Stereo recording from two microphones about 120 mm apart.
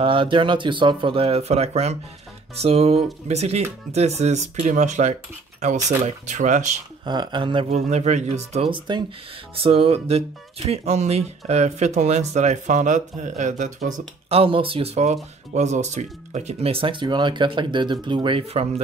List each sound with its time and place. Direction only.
0.0 s speech: 45° right (ahead or behind); by 5.1 s 75° right (ahead or behind)
6.0 s speech: 90° right
7.1 s speech: 40° right (ahead or behind)
7.7 s speech: 65° right (ahead or behind)
8.6 s speech: 40° right (ahead or behind)
9.6 s speech: 50° right (ahead or behind); by 14.0 s 90° right
14.3 s speech: 50° right (ahead or behind)
15.5 s speech: 70° right (ahead or behind); by 18.4 s 40° right (ahead or behind)